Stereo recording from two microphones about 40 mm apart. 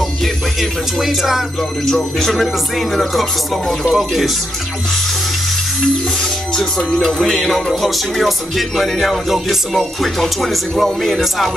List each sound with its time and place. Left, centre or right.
0.2 s speech: centre
1.9 s speech: centre
2.4 s music: centre
3.9 s speech: centre
7.0 s music: centre
9.8 s music: centre